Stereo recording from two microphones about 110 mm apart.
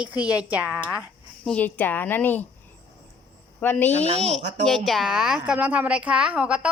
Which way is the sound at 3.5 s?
15° left (ahead or behind).